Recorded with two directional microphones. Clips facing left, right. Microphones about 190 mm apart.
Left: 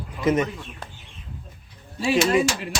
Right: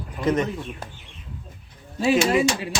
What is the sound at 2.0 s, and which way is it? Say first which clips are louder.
Speech: right 1 dB; centre (ahead or behind).